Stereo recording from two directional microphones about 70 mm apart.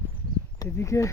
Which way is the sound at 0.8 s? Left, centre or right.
Left.